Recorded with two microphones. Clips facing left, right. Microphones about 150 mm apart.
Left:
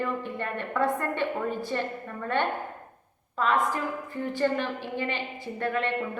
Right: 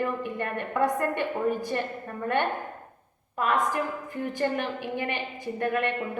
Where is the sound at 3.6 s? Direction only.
15° right (ahead or behind).